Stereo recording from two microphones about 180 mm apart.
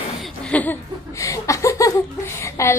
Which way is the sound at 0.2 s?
5° left (ahead or behind).